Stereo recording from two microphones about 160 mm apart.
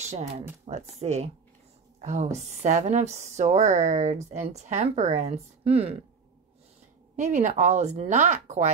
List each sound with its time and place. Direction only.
0.7 s a woman's voice: 45° right (ahead or behind)
7.2 s a woman's voice: 50° right (ahead or behind)